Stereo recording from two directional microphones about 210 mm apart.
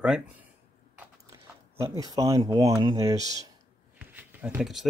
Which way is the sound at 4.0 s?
10° right (ahead or behind).